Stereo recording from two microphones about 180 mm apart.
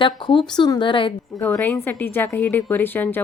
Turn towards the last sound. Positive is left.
turn(degrees=10)  # may be behind; listen again after turning